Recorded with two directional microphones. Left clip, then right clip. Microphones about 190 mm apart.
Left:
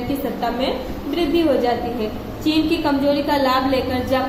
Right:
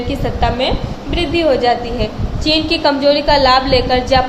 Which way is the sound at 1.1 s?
10° right (ahead or behind).